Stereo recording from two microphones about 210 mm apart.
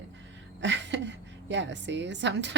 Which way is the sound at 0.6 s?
60° right (ahead or behind).